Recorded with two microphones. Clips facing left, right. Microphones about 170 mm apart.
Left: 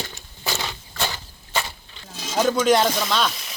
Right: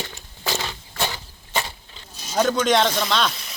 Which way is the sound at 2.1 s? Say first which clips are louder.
Left 7 dB; 90° left.